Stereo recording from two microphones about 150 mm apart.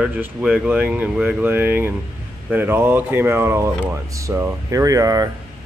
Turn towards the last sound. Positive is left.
turn(degrees=-25)  # may be behind; listen again after turning